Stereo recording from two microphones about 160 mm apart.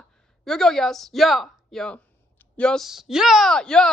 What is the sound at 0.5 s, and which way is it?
Speech, 5° left (ahead or behind).